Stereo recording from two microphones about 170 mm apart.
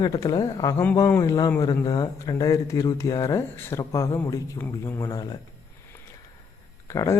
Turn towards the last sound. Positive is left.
turn(degrees=15)  # may be behind; listen again after turning